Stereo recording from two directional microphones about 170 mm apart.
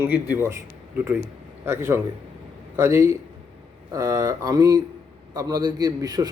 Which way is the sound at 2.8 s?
15° right (ahead or behind).